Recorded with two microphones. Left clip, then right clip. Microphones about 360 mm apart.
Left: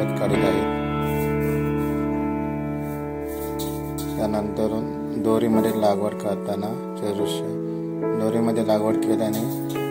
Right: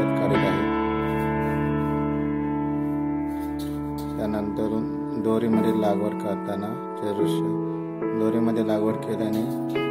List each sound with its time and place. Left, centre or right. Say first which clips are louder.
5.2 s speech: left 3 dB; centre
8.2 s speech: right 1 dB; centre